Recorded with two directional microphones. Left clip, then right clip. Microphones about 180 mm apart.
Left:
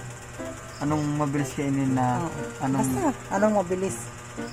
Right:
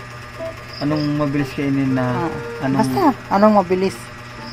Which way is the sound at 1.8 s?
Centre (ahead or behind).